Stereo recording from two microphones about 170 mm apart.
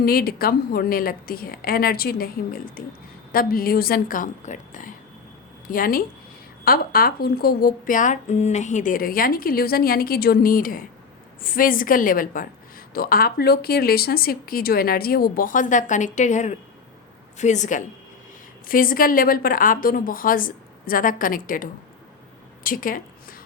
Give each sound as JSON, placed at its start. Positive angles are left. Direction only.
{"t": 0.0, "sound": "a woman's voice", "side_deg": 60}